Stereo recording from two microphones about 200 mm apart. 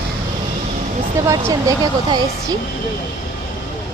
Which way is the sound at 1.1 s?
15° right (ahead or behind).